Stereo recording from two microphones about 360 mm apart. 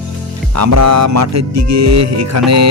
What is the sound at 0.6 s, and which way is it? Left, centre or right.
Speech, right.